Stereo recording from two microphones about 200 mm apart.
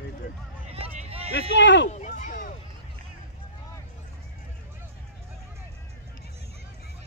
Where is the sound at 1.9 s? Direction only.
35° left (ahead or behind).